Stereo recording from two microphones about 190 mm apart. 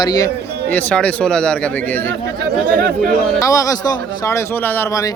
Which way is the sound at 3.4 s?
15° left (ahead or behind).